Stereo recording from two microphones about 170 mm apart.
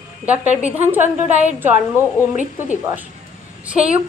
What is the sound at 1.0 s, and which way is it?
Speech, 40° right (ahead or behind).